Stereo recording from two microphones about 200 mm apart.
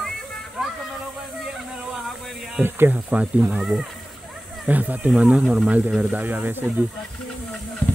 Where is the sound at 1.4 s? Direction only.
Centre (ahead or behind).